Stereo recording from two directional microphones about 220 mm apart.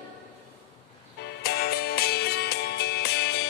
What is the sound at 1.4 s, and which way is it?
Music, 45° left (ahead or behind).